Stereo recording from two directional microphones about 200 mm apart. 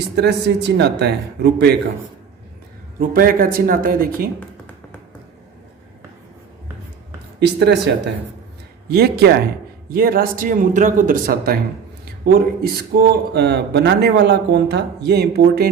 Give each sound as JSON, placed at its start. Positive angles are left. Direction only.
{"t": 0.2, "sound": "a man's voice", "side_deg": -55}
{"t": 3.0, "sound": "speech", "side_deg": -45}
{"t": 7.3, "sound": "a man's voice", "side_deg": -55}